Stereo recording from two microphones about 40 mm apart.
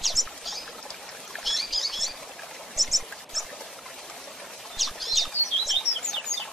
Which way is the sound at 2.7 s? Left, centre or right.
Centre.